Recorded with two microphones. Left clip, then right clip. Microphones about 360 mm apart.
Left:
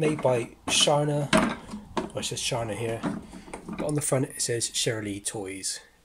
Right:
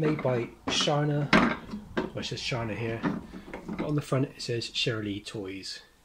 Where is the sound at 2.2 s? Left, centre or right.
Left.